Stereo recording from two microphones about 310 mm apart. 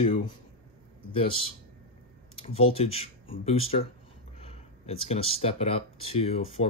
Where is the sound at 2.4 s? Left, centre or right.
Centre.